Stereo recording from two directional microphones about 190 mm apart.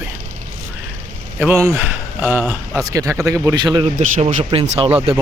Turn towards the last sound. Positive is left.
turn(degrees=-30)  # may be behind; listen again after turning